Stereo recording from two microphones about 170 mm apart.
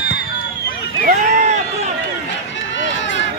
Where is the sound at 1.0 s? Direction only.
45° right (ahead or behind).